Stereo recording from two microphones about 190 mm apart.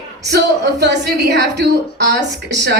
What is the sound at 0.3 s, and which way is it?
A woman's voice, 65° right (ahead or behind).